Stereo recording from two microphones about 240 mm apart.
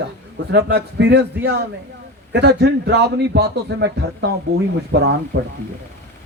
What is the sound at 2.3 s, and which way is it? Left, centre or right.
A man's voice, right.